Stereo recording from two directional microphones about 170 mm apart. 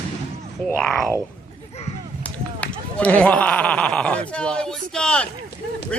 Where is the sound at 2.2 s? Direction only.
10° left (ahead or behind).